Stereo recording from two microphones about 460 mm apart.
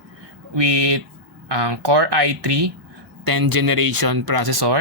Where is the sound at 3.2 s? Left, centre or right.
Right.